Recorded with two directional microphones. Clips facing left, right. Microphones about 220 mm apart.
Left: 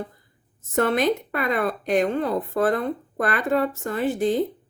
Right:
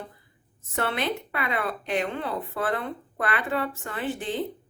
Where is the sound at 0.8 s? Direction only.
45° left (ahead or behind).